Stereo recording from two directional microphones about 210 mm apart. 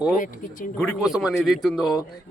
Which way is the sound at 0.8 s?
Centre (ahead or behind).